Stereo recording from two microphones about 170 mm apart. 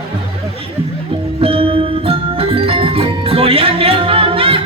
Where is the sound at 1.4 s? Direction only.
35° right (ahead or behind).